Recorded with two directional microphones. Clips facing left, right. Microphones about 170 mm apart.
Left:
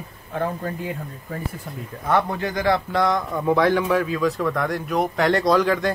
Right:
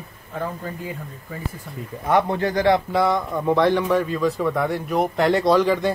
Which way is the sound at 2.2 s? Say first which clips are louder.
Right 4 dB; 30° right (ahead or behind).